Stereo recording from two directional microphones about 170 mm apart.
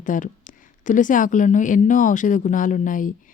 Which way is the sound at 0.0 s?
50° left (ahead or behind).